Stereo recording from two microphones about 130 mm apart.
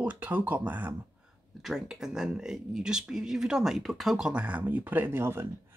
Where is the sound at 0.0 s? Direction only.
15° right (ahead or behind).